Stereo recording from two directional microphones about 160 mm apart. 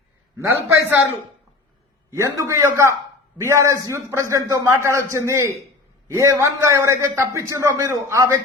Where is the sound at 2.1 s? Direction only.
20° right (ahead or behind).